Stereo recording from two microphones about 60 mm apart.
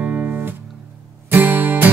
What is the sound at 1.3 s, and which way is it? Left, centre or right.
Music, right.